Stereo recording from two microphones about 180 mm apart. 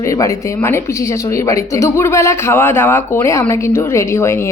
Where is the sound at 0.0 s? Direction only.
15° left (ahead or behind).